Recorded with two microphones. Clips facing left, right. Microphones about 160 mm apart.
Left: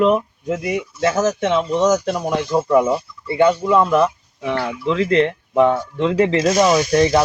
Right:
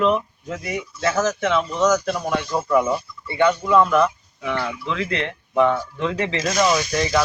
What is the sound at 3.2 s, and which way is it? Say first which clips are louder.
Speech: left 4 dB; 30° left (ahead or behind).